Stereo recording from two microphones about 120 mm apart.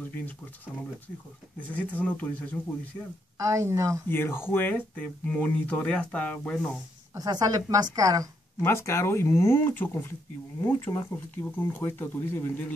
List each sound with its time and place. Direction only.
1.7 s speech: 15° left (ahead or behind)
3.3 s a woman's voice: 25° right (ahead or behind)
4.1 s speech: 20° left (ahead or behind)
7.2 s a woman's voice: 30° right (ahead or behind)
8.5 s speech: 20° left (ahead or behind)